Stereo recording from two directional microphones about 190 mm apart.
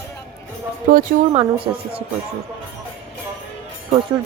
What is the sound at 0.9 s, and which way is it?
Speech, 50° right (ahead or behind).